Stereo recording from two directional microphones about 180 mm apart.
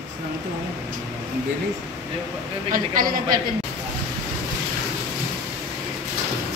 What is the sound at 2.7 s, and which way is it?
Speech, 50° right (ahead or behind).